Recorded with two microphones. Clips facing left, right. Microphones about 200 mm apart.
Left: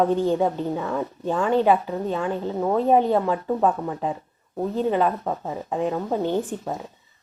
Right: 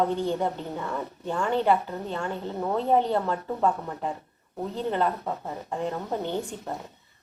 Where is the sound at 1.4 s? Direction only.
15° left (ahead or behind).